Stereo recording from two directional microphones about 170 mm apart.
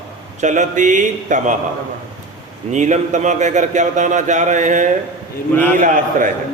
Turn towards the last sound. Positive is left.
turn(degrees=-50)  # may be behind; listen again after turning